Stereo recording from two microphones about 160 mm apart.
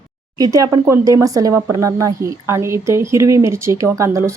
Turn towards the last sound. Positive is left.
turn(degrees=-20)  # may be behind; listen again after turning